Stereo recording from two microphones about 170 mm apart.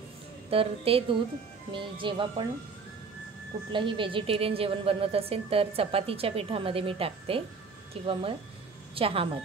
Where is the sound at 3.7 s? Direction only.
30° right (ahead or behind).